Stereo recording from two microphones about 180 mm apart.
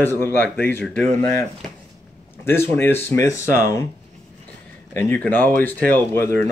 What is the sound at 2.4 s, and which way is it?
Speech, 15° left (ahead or behind).